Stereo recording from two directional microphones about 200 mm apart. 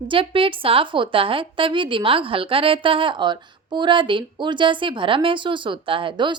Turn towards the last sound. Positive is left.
turn(degrees=-25)  # may be behind; listen again after turning